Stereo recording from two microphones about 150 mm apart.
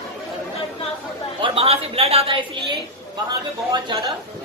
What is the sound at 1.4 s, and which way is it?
A woman's voice, 40° right (ahead or behind).